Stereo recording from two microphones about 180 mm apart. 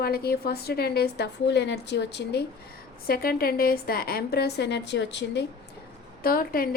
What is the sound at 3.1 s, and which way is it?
A woman's voice, 55° left (ahead or behind).